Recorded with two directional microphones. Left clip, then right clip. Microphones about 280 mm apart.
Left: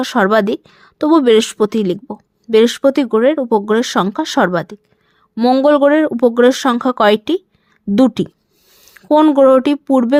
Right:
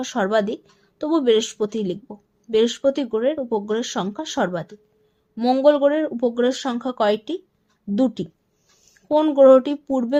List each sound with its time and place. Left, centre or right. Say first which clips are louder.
0.0 s a woman's voice: left 8 dB; left